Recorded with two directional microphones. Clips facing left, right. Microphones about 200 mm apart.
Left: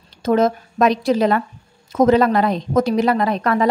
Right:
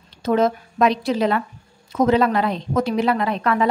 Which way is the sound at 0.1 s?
45° left (ahead or behind).